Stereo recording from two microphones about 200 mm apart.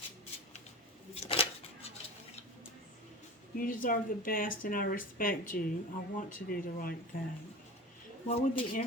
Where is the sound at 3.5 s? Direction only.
45° left (ahead or behind).